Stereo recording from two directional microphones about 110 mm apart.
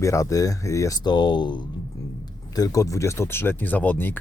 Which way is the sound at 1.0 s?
40° left (ahead or behind).